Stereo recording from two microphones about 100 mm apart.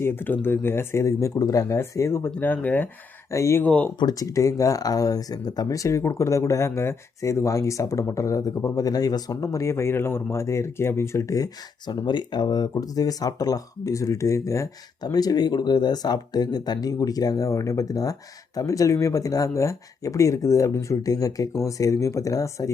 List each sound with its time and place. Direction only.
0.0 s speech: 20° left (ahead or behind)
3.3 s speech: 30° left (ahead or behind)
3.6 s speech: 15° left (ahead or behind)
4.0 s speech: 35° left (ahead or behind)
12.0 s speech: 45° left (ahead or behind); by 14.7 s 30° left (ahead or behind)
15.0 s speech: 40° left (ahead or behind)